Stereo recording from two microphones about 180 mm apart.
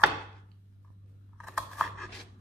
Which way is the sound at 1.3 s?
Centre (ahead or behind).